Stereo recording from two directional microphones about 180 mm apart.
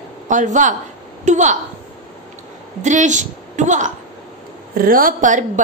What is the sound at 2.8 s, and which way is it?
A woman's voice, 45° right (ahead or behind).